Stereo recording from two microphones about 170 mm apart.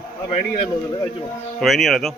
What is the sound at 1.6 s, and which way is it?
Speech, centre (ahead or behind).